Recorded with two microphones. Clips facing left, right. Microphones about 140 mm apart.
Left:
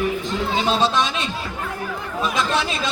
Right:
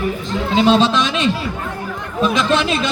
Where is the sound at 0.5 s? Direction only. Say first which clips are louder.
Right 7 dB; 80° right.